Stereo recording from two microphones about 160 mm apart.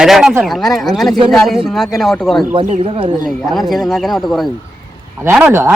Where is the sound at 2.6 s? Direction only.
35° right (ahead or behind).